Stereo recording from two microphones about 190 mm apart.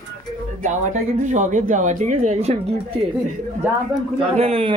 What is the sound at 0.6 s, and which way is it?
Speech, 40° right (ahead or behind).